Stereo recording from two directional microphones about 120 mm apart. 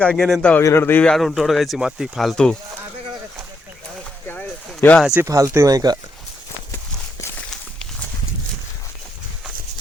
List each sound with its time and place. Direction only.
0.0 s speech: 5° left (ahead or behind)
0.6 s speech: 20° left (ahead or behind)
1.1 s speech: centre (ahead or behind)
4.3 s a sound: 15° left (ahead or behind)
5.2 s speech: 25° right (ahead or behind)